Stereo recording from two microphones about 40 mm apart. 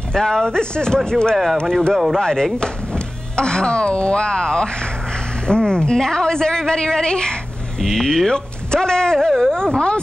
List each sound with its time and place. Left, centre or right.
0.1 s speech: centre
1.3 s speech: centre
2.1 s a woman's voice: centre
7.8 s speech: centre
8.3 s speech: centre